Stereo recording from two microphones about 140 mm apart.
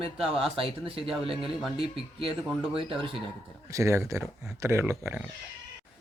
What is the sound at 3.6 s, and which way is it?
Speech, 20° right (ahead or behind).